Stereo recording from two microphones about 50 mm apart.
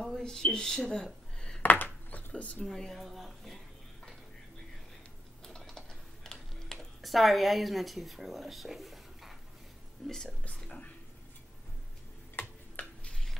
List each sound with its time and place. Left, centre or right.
0.2 s speech: centre
1.6 s a sound: left
2.6 s speech: centre
5.4 s typing: centre
7.0 s a woman's voice: centre
10.5 s speech: centre
12.4 s tick-tock: left
12.8 s a sound: left
13.1 s a sound: centre